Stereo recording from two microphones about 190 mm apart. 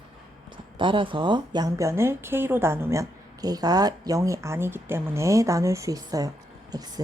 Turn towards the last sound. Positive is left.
turn(degrees=-20)  # may be behind; listen again after turning